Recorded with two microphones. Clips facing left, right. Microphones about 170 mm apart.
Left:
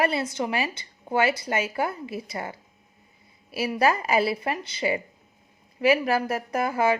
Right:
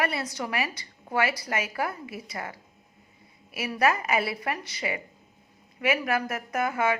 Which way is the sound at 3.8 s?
30° left (ahead or behind).